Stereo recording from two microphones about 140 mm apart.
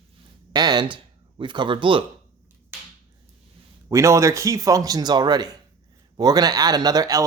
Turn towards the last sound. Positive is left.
turn(degrees=-25)  # may be behind; listen again after turning